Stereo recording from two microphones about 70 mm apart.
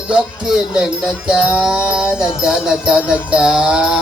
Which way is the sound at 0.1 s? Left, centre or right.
Centre.